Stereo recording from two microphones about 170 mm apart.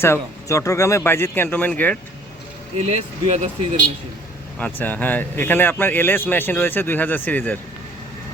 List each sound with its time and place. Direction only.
0.0 s speech: 15° left (ahead or behind)
2.7 s speech: 40° right (ahead or behind)
4.6 s speech: 10° left (ahead or behind)